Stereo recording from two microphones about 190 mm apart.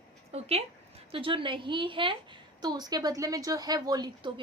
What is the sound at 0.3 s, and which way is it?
A woman's voice, 35° right (ahead or behind).